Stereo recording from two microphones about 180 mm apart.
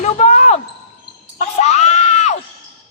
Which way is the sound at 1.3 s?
35° left (ahead or behind).